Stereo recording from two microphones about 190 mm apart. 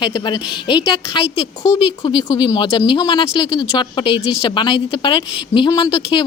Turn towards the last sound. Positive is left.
turn(degrees=20)  # may be behind; listen again after turning